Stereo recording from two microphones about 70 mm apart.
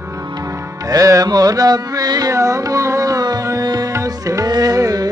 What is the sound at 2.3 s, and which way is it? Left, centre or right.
Music, right.